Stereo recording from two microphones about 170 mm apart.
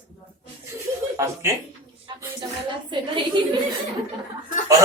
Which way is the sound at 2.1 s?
25° right (ahead or behind).